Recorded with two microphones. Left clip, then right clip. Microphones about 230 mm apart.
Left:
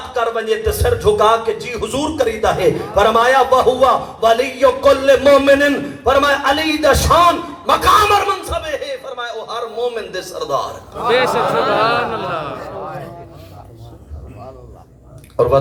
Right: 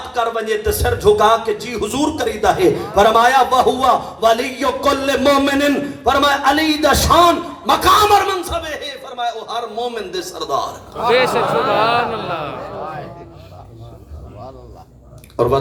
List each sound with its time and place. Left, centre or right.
0.1 s a man's voice: right
11.1 s a man's voice: centre
15.4 s a man's voice: right